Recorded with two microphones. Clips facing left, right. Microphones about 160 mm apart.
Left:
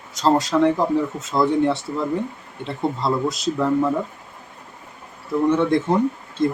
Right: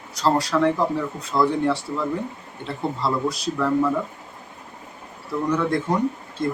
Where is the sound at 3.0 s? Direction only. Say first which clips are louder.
Left 1 dB; 20° left (ahead or behind).